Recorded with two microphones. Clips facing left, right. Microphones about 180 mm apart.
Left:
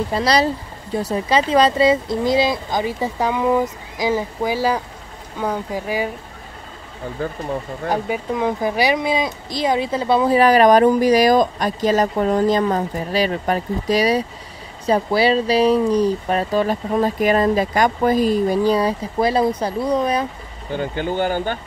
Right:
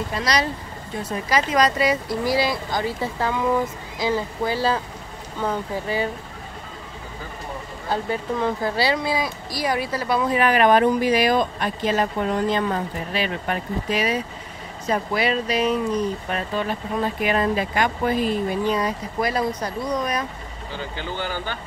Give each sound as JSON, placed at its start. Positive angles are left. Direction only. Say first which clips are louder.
{"t": 0.1, "sound": "speech", "louder": "left 6 dB", "side_deg": 30}
{"t": 7.9, "sound": "speech", "louder": "left 2 dB", "side_deg": 15}
{"t": 20.7, "sound": "speech", "louder": "left 9 dB", "side_deg": 50}